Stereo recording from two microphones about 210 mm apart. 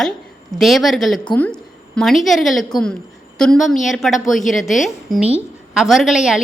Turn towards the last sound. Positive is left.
turn(degrees=0)  # may be behind; listen again after turning